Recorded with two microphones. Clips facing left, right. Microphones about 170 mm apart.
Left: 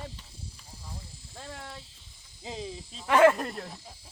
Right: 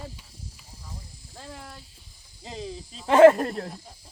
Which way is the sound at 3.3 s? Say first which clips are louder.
Right 6 dB; 40° right (ahead or behind).